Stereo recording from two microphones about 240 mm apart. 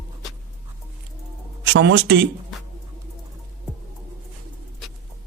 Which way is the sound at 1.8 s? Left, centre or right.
Right.